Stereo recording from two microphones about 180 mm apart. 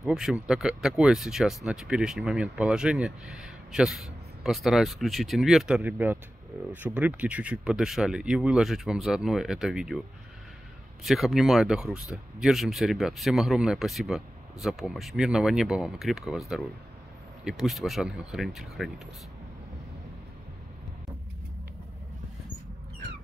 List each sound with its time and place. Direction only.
0.0 s speech: 5° right (ahead or behind)
11.1 s speech: centre (ahead or behind)